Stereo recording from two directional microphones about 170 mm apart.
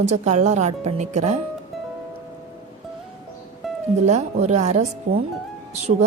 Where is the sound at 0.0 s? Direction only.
40° right (ahead or behind).